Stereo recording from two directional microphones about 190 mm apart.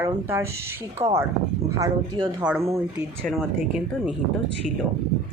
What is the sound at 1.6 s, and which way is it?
Speech, 15° right (ahead or behind).